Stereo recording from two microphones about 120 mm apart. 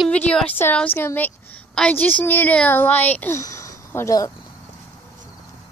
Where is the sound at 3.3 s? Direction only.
25° left (ahead or behind).